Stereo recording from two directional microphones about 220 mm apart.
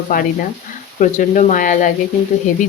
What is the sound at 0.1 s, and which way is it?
Speech, 40° left (ahead or behind).